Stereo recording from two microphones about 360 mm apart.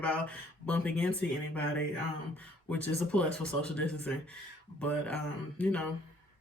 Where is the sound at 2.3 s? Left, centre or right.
Centre.